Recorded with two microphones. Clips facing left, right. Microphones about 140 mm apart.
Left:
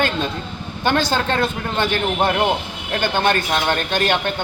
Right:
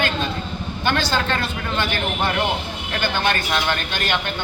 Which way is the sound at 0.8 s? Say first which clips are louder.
Left 3 dB; 45° left (ahead or behind).